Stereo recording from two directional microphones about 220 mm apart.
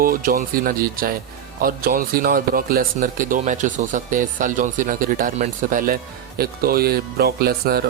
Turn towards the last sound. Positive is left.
turn(degrees=-45)  # may be behind; listen again after turning